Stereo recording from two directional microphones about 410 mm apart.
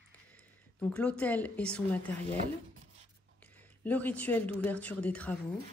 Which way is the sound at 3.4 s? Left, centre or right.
Centre.